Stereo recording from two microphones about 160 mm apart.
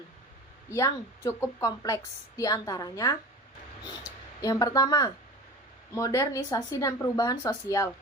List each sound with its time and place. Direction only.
0.7 s a woman's voice: 20° left (ahead or behind)
4.4 s a woman's voice: 20° left (ahead or behind)